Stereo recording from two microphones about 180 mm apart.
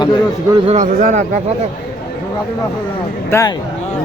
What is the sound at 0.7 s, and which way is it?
Speech, 40° right (ahead or behind).